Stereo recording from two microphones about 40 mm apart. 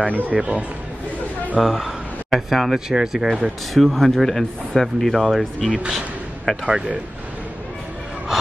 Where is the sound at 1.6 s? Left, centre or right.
Centre.